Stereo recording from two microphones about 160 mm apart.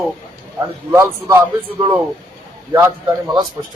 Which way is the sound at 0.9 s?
15° right (ahead or behind).